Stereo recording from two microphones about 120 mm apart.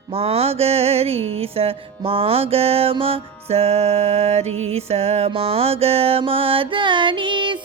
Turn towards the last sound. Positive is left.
turn(degrees=-40)  # may be behind; listen again after turning